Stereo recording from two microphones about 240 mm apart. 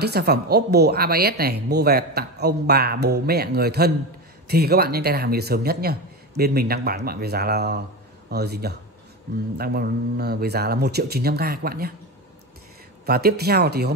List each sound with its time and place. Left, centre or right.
0.0 s speech: right
13.0 s speech: right